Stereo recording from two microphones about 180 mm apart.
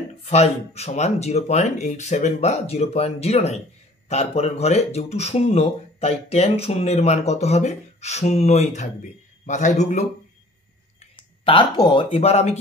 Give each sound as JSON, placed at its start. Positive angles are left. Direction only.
{"t": 0.2, "sound": "speech", "side_deg": 35}
{"t": 11.0, "sound": "speech", "side_deg": 30}